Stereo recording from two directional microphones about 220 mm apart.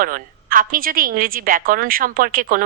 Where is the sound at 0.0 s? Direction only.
40° right (ahead or behind).